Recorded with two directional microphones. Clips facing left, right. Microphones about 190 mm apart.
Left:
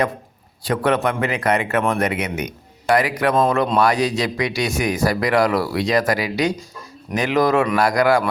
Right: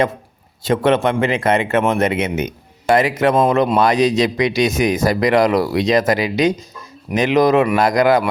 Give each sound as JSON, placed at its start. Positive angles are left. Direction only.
{"t": 0.6, "sound": "a man's voice", "side_deg": -25}